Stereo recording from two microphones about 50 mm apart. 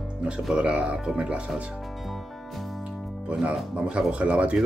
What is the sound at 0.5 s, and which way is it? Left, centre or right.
Speech, right.